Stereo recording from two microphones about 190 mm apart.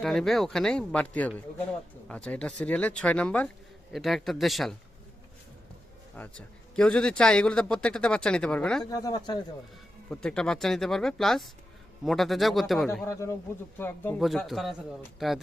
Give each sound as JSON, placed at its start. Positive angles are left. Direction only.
{"t": 0.0, "sound": "a man's voice", "side_deg": 0}
{"t": 6.1, "sound": "a man's voice", "side_deg": 5}
{"t": 8.8, "sound": "speech", "side_deg": 20}
{"t": 10.1, "sound": "a man's voice", "side_deg": 5}
{"t": 12.9, "sound": "speech", "side_deg": 15}
{"t": 14.2, "sound": "a man's voice", "side_deg": 0}